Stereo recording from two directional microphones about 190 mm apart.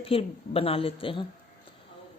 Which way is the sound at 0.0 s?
30° left (ahead or behind).